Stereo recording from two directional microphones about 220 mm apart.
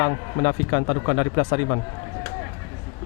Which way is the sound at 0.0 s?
20° left (ahead or behind).